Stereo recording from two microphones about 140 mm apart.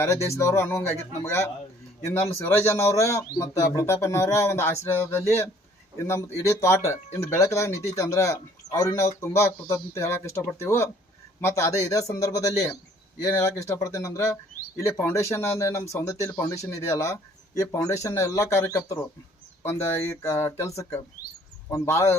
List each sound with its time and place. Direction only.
0.0 s speech: 20° left (ahead or behind)